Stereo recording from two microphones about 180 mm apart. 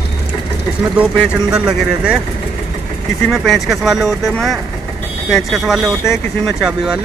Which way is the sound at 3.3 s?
Centre (ahead or behind).